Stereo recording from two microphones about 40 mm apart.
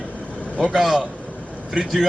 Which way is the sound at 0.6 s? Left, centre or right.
Centre.